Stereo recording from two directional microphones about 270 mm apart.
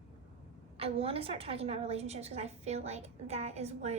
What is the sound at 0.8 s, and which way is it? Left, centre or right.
A woman's voice, right.